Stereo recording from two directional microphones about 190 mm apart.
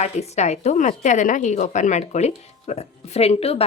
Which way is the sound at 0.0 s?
35° left (ahead or behind).